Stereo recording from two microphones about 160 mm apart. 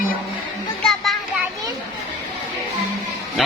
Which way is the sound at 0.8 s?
Centre (ahead or behind).